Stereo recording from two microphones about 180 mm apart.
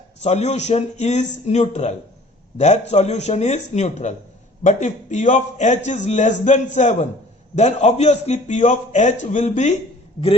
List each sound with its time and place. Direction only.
0.2 s a man's voice: 35° left (ahead or behind)